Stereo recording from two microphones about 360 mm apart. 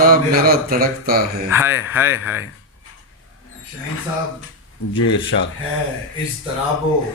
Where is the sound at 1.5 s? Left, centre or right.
Centre.